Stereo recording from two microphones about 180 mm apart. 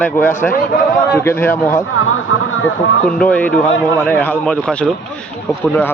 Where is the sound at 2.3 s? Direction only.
90° left.